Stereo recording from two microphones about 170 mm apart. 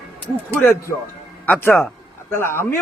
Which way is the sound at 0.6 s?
15° left (ahead or behind).